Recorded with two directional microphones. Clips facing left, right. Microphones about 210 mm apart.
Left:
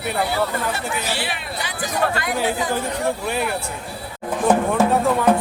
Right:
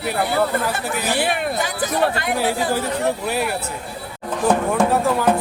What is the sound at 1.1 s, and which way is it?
Speech, 50° right (ahead or behind).